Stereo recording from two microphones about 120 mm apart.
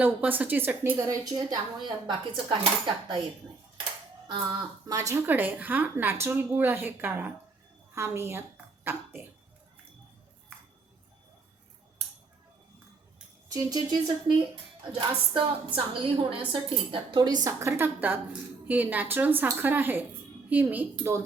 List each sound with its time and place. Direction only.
0.0 s a woman's voice: 15° right (ahead or behind)
0.9 s speech: 30° right (ahead or behind)
4.3 s speech: 35° right (ahead or behind)
5.2 s a woman's voice: 15° right (ahead or behind)
13.5 s speech: 30° right (ahead or behind)
15.3 s a woman's voice: 45° right (ahead or behind)
17.6 s a woman's voice: 20° right (ahead or behind)